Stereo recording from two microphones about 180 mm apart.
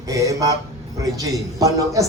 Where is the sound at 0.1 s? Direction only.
20° right (ahead or behind).